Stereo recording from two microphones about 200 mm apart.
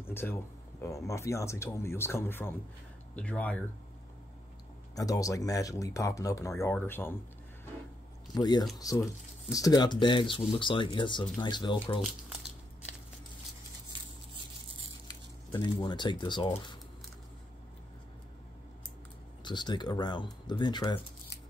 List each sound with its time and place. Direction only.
0.1 s speech: 10° left (ahead or behind)
4.9 s speech: 15° left (ahead or behind)
8.4 s speech: 20° left (ahead or behind)
12.0 s crumpling: 5° right (ahead or behind)
15.0 s speech: 20° left (ahead or behind)
19.4 s speech: 20° left (ahead or behind)